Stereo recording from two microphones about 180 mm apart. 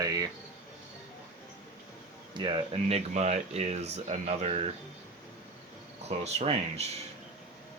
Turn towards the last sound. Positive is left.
turn(degrees=-35)  # may be behind; listen again after turning